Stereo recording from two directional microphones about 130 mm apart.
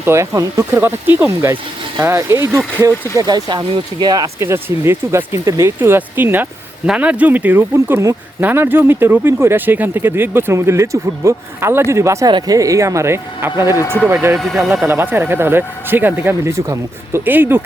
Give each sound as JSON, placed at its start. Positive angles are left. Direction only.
{"t": 0.0, "sound": "speech", "side_deg": -20}
{"t": 13.7, "sound": "speech", "side_deg": 30}
{"t": 14.1, "sound": "speech", "side_deg": -15}
{"t": 14.3, "sound": "a man's voice", "side_deg": 0}
{"t": 14.8, "sound": "speech", "side_deg": -20}